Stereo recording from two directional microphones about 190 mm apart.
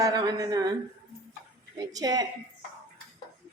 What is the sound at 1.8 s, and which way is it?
Speech, 20° right (ahead or behind).